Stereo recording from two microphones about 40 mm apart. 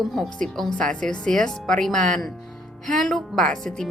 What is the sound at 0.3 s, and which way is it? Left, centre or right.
Speech, centre.